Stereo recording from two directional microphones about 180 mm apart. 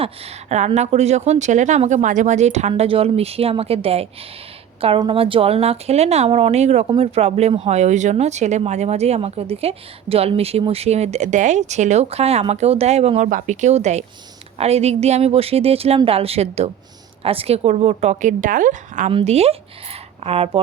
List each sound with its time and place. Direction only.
0.0 s speech: 35° right (ahead or behind)